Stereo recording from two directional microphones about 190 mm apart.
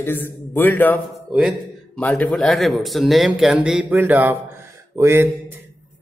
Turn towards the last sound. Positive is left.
turn(degrees=-15)  # may be behind; listen again after turning